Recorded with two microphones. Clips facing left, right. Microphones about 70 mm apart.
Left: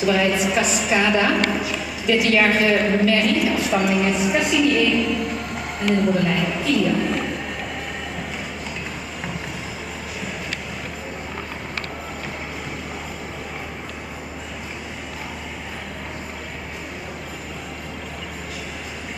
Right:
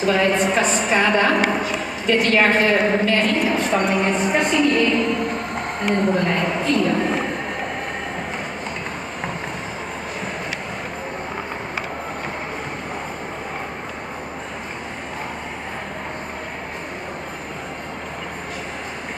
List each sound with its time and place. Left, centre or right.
0.0 s a woman's voice: centre
4.8 s a woman's voice: right
5.2 s music: right
5.9 s a woman's voice: right